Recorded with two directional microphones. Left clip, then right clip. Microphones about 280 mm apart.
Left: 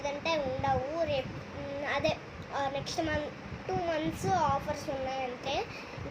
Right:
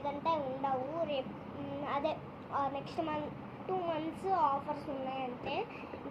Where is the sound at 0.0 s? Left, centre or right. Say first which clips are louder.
Left 2 dB; centre.